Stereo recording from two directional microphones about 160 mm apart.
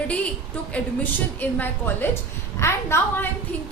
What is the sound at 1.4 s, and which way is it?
A woman's voice, 10° left (ahead or behind).